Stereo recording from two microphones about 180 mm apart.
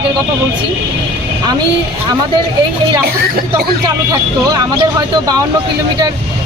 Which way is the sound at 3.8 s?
20° right (ahead or behind).